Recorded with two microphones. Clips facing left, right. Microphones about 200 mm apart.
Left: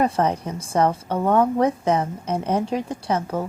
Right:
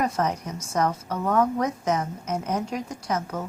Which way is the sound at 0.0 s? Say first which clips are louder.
Left 5 dB; 30° left (ahead or behind).